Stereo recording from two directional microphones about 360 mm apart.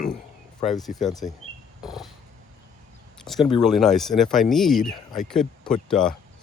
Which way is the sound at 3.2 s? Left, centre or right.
Centre.